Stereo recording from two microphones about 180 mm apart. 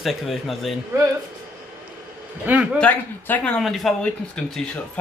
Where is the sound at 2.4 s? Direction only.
10° right (ahead or behind).